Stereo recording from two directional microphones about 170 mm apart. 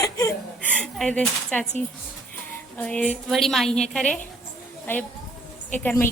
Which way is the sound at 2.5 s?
10° left (ahead or behind).